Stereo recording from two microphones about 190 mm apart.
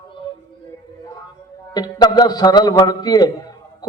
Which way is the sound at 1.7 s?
20° left (ahead or behind).